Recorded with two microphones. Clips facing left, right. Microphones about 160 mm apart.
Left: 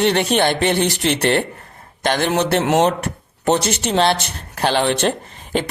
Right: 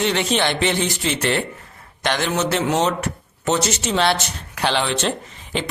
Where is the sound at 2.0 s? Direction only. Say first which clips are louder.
Left 3 dB; 50° left (ahead or behind).